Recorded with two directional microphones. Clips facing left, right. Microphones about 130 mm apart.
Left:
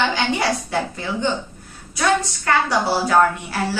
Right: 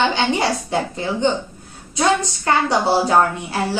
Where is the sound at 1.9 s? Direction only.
25° right (ahead or behind).